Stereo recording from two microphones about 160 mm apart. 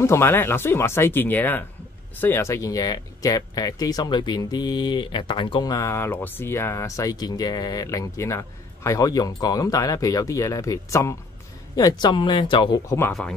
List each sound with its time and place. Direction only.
0.0 s speech: 15° left (ahead or behind); by 12.8 s 30° left (ahead or behind)